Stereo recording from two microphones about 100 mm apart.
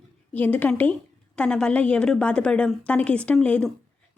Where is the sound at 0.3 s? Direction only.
15° left (ahead or behind).